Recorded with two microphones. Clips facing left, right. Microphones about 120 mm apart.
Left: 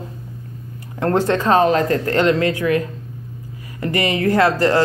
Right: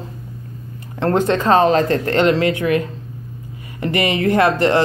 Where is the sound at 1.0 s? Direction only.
25° right (ahead or behind).